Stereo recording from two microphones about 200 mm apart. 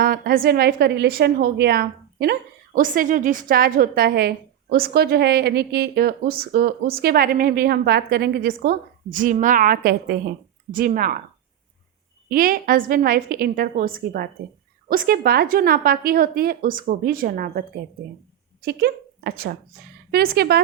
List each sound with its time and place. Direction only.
0.0 s a woman's voice: 45° right (ahead or behind)
12.3 s a woman's voice: 45° right (ahead or behind)